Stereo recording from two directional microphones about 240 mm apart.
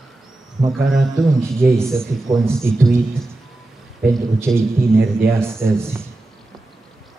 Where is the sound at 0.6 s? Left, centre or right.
Centre.